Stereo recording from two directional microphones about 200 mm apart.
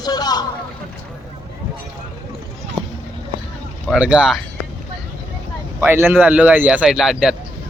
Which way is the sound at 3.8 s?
5° right (ahead or behind).